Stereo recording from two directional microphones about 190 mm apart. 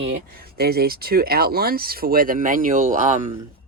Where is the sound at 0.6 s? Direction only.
55° right (ahead or behind).